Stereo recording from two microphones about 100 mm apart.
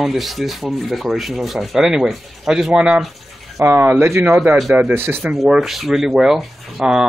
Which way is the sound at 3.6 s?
20° right (ahead or behind).